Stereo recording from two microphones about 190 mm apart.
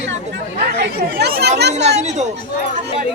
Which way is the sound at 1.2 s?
60° right (ahead or behind).